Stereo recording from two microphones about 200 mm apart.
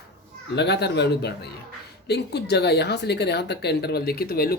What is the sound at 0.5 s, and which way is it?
Speech, 55° left (ahead or behind).